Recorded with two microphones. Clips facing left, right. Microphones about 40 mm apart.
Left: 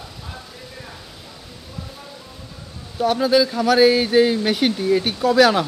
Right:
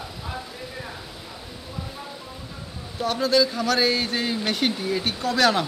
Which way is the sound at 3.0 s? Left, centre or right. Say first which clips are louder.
Left 4 dB; centre.